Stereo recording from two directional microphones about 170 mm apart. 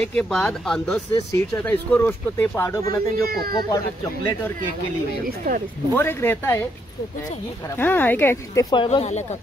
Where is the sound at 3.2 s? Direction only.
60° right (ahead or behind).